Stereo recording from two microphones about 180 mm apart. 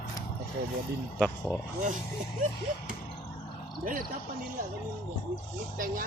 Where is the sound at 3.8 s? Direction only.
50° right (ahead or behind).